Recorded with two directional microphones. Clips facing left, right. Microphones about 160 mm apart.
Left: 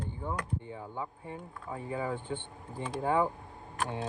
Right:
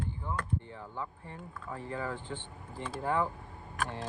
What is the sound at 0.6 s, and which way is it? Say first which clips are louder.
Speech: left 2 dB; 15° left (ahead or behind).